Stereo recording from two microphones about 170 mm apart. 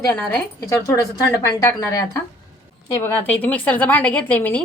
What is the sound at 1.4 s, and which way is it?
Speech, 20° left (ahead or behind).